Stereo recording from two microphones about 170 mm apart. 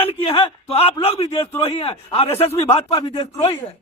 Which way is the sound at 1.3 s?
20° left (ahead or behind).